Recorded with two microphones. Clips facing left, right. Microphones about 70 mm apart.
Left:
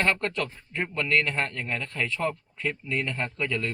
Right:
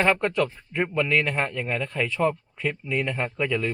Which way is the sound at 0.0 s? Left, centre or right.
Centre.